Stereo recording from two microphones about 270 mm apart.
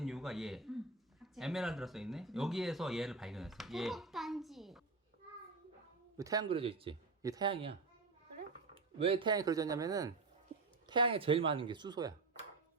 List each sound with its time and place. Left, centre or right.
0.0 s a sound: centre
1.2 s speech: centre
6.1 s a man's voice: centre
9.0 s a man's voice: centre